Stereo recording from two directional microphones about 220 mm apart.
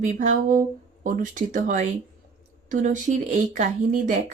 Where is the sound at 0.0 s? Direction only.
35° right (ahead or behind).